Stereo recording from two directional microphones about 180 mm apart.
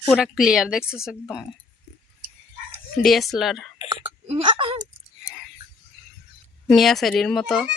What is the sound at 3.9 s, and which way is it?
Speech, 30° right (ahead or behind).